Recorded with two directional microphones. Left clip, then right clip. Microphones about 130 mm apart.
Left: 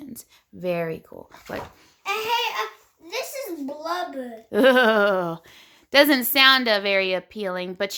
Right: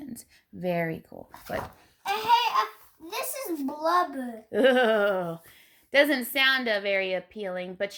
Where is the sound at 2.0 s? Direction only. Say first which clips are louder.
Right 1 dB; 5° right (ahead or behind).